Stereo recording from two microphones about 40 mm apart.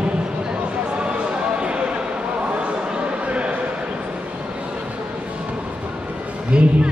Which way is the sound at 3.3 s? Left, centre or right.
Right.